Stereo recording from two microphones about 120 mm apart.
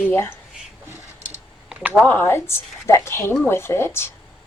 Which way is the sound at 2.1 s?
15° left (ahead or behind).